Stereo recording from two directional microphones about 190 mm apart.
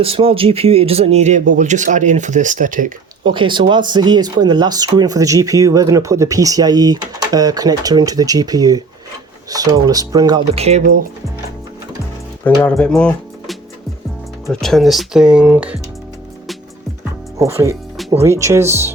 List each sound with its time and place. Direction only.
0.0 s speech: 30° right (ahead or behind)
3.2 s speech: 25° right (ahead or behind)
12.6 s speech: 5° left (ahead or behind)
14.6 s speech: centre (ahead or behind)
17.3 s speech: 15° right (ahead or behind)